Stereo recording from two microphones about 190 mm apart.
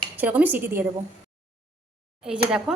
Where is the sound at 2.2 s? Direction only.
5° right (ahead or behind).